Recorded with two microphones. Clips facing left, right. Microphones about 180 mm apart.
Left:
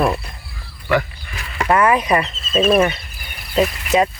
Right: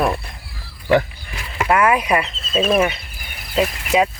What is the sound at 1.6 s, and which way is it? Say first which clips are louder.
Speech: left 1 dB; 5° right (ahead or behind).